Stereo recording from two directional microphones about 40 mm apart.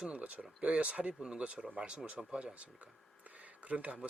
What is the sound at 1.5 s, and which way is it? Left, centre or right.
Speech, right.